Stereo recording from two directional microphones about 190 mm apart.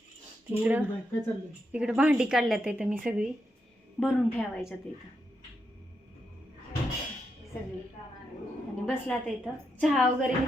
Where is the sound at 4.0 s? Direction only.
5° left (ahead or behind).